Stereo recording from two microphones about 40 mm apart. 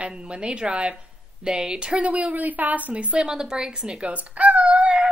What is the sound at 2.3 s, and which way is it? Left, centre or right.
Speech, right.